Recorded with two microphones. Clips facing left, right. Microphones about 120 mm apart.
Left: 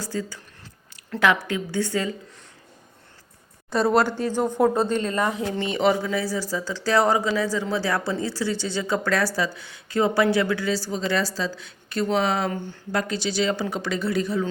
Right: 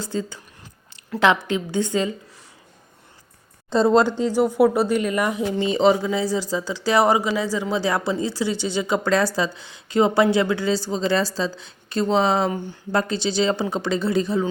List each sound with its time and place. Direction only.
0.0 s speech: 25° right (ahead or behind)
3.7 s speech: 20° right (ahead or behind)